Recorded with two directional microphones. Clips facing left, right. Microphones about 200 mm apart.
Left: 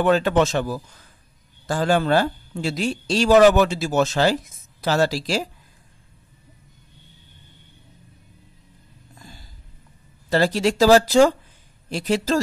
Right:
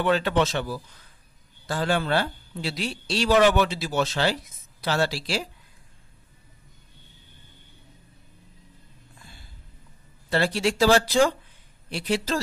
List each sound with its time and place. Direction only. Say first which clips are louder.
0.0 s speech: left 4 dB; 45° left (ahead or behind)
9.2 s snort: left 7 dB; 40° left (ahead or behind)
10.3 s speech: left 4 dB; 40° left (ahead or behind)